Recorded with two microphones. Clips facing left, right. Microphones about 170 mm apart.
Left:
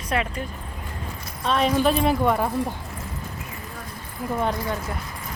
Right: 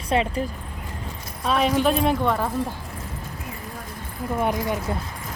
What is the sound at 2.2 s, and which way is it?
Speech, 10° left (ahead or behind).